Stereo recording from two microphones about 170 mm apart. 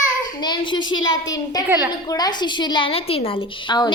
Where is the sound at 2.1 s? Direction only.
25° left (ahead or behind).